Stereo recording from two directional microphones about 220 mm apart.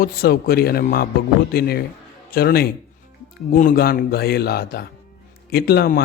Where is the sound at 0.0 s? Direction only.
45° left (ahead or behind).